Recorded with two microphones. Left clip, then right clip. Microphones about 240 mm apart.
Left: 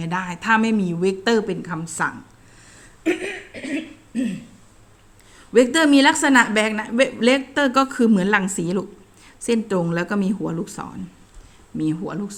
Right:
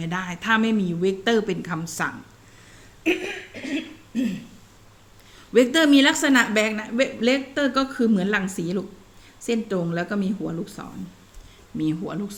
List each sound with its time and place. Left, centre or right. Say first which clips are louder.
0.0 s a woman's voice: left 3 dB; centre
3.0 s cough: left 1 dB; centre
4.1 s throat clearing: left 1 dB; centre
5.5 s a woman's voice: left 2 dB; centre
11.8 s a woman's voice: left 2 dB; centre